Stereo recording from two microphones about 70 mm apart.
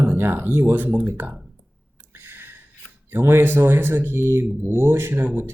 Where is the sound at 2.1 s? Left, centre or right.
Right.